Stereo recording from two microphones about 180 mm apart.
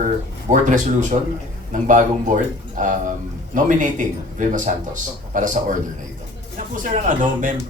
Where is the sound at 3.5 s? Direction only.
45° right (ahead or behind).